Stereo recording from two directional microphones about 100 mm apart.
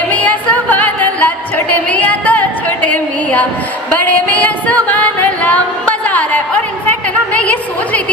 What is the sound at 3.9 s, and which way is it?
Music, 15° left (ahead or behind).